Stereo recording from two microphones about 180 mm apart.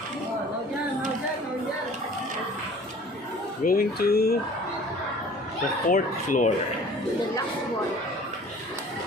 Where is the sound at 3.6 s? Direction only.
55° left (ahead or behind).